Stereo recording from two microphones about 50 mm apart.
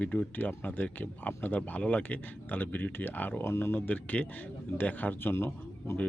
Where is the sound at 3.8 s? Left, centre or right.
Left.